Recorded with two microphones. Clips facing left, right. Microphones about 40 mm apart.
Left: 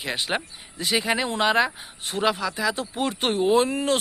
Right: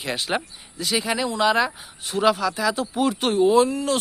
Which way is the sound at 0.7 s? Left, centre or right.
Left.